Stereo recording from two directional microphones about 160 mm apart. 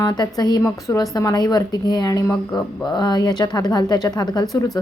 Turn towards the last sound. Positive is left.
turn(degrees=25)  # may be behind; listen again after turning